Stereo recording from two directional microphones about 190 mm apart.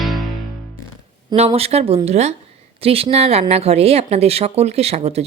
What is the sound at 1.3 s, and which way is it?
Speech, 30° right (ahead or behind).